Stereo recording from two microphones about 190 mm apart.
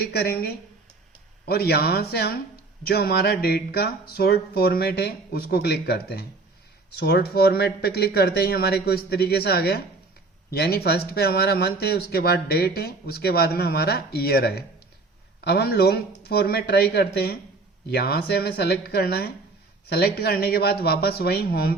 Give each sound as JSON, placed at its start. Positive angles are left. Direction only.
{"t": 0.0, "sound": "speech", "side_deg": 55}